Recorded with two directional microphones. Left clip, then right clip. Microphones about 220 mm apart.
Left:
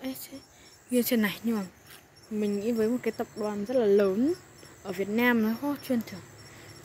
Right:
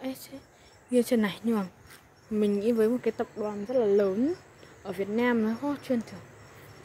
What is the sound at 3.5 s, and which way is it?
Speech, 15° left (ahead or behind).